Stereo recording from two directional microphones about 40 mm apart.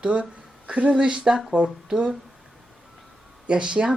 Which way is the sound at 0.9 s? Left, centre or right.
Centre.